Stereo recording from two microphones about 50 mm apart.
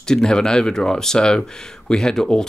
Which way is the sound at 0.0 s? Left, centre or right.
Centre.